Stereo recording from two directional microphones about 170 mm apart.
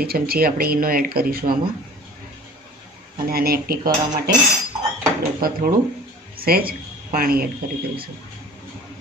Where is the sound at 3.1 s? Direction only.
60° right (ahead or behind).